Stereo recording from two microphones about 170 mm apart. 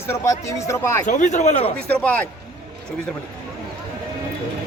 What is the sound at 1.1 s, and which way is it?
Speech, 45° left (ahead or behind).